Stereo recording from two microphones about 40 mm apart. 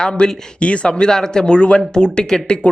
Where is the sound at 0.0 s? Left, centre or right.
Centre.